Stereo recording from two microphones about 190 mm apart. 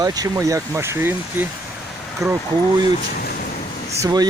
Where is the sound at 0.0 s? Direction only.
20° right (ahead or behind).